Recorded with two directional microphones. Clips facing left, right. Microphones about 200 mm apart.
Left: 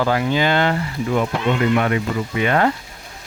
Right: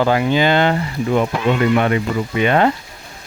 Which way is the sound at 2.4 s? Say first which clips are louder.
Right 3 dB; 20° right (ahead or behind).